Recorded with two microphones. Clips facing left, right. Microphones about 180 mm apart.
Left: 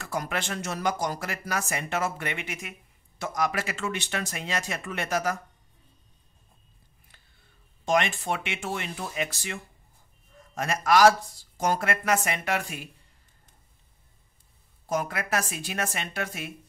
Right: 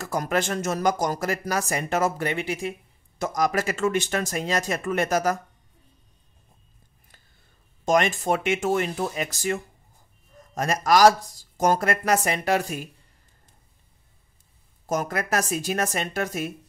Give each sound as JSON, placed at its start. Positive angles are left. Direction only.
{"t": 0.0, "sound": "speech", "side_deg": -40}
{"t": 7.8, "sound": "speech", "side_deg": -45}
{"t": 14.9, "sound": "speech", "side_deg": -45}